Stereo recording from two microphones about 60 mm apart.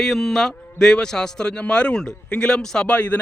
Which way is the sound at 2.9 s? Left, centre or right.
Left.